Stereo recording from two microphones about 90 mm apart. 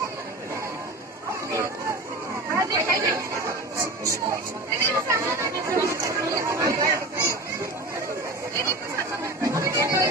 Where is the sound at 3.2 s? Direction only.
35° right (ahead or behind).